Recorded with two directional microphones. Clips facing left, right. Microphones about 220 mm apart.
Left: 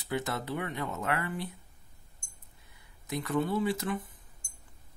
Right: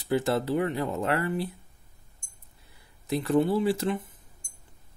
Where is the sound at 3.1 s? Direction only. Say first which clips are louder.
Right 7 dB; 30° right (ahead or behind).